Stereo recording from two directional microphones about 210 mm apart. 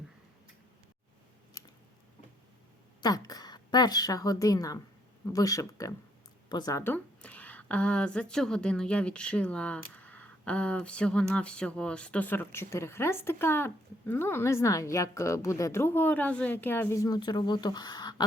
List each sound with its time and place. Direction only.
3.0 s a woman's voice: 20° left (ahead or behind)